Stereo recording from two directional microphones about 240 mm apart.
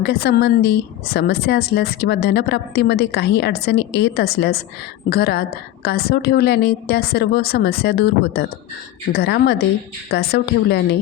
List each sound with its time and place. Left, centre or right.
0.0 s a woman's voice: left